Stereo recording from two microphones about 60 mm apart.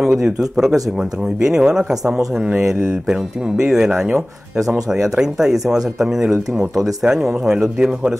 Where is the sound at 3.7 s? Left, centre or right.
Centre.